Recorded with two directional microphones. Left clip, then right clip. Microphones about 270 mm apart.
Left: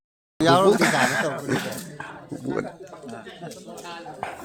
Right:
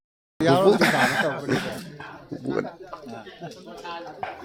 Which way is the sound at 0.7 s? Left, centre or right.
Centre.